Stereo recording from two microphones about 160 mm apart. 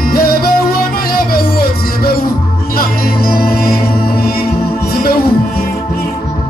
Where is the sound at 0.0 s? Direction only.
70° left (ahead or behind).